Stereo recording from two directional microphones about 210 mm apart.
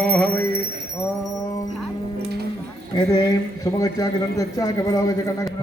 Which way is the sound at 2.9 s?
15° left (ahead or behind).